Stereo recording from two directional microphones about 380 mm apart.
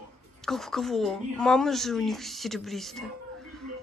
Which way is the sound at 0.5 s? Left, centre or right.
Centre.